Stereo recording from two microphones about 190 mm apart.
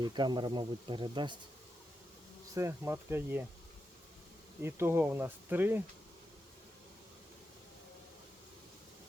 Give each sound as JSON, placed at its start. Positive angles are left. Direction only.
{"t": 0.0, "sound": "speech", "side_deg": -20}
{"t": 2.6, "sound": "speech", "side_deg": -15}
{"t": 4.6, "sound": "speech", "side_deg": -10}